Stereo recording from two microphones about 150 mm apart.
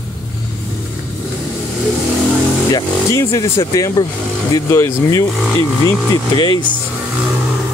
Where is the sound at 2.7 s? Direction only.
20° left (ahead or behind).